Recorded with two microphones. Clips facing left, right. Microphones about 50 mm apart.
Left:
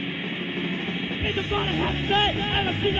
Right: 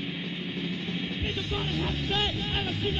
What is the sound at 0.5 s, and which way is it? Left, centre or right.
Music, left.